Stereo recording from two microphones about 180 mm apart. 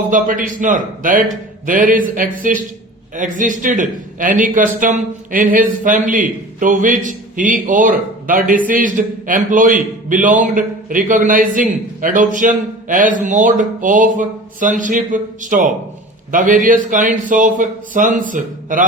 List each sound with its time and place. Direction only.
0.1 s speech: 50° right (ahead or behind)